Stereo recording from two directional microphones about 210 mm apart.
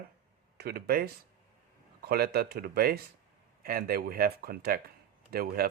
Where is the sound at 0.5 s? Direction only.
50° right (ahead or behind).